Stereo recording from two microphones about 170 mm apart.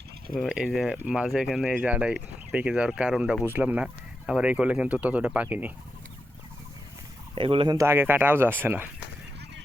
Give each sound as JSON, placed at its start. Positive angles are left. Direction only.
{"t": 0.3, "sound": "speech", "side_deg": -5}
{"t": 7.3, "sound": "speech", "side_deg": -30}
{"t": 7.8, "sound": "speech", "side_deg": -15}